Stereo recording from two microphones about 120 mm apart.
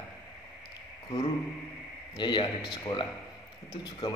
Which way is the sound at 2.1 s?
40° left (ahead or behind).